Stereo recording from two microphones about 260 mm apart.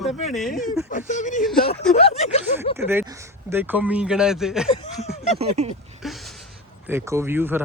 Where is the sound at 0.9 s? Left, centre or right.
Left.